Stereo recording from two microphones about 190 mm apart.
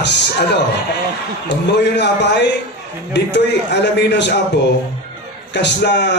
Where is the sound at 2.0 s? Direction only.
65° left (ahead or behind).